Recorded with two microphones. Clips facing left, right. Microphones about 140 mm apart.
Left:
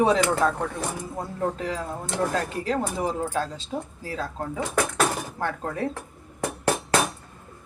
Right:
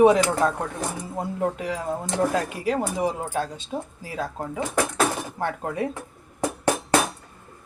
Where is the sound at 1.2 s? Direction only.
15° right (ahead or behind).